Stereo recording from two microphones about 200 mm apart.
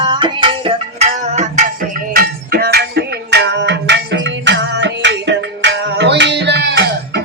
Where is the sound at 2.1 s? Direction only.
50° right (ahead or behind).